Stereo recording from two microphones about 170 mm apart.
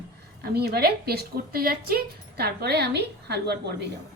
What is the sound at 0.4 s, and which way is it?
A woman's voice, 65° right (ahead or behind).